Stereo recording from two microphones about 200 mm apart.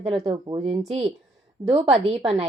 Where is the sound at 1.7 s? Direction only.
30° right (ahead or behind).